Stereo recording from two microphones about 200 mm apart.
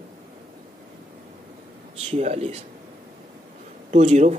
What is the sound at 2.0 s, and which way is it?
Speech, 30° right (ahead or behind).